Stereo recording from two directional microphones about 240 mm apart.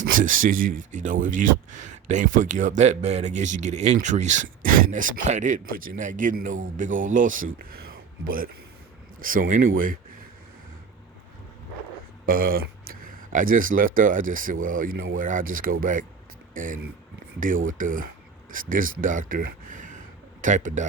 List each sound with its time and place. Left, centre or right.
0.0 s speech: right
7.6 s a sound: right
9.2 s speech: right
12.2 s speech: right